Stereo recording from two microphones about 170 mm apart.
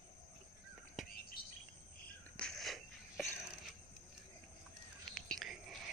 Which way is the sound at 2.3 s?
5° left (ahead or behind).